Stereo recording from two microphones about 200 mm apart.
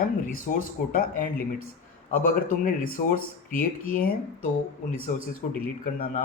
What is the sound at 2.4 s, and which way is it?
Speech, 40° left (ahead or behind).